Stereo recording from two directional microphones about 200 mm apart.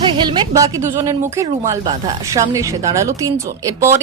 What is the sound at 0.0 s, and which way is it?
Speech, 25° right (ahead or behind).